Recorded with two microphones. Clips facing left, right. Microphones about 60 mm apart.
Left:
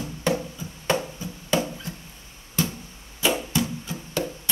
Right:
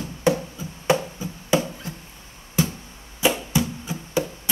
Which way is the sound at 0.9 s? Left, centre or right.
Centre.